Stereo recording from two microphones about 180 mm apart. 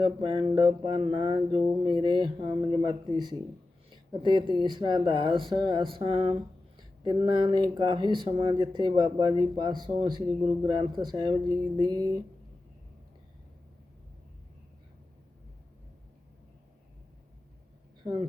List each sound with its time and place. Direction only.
0.0 s speech: 25° right (ahead or behind)
6.7 s a sound: 25° right (ahead or behind)
7.3 s speech: 25° right (ahead or behind)